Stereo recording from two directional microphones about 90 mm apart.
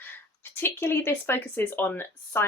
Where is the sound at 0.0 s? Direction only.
25° left (ahead or behind).